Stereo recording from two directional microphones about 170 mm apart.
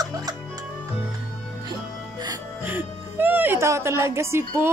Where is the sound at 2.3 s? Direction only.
10° right (ahead or behind).